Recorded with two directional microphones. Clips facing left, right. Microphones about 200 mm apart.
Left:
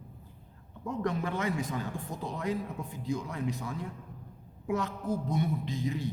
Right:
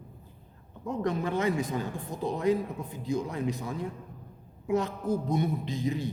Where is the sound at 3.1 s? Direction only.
20° right (ahead or behind).